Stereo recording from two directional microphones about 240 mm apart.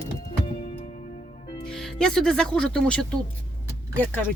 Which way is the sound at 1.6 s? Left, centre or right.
Centre.